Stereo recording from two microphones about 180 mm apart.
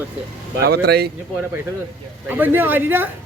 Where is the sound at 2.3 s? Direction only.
10° right (ahead or behind).